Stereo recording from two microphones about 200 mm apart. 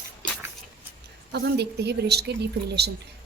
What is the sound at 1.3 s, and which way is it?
A woman's voice, 60° right (ahead or behind).